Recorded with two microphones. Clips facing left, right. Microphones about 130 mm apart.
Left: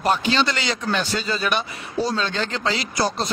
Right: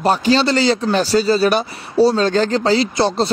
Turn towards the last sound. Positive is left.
turn(degrees=-30)  # may be behind; listen again after turning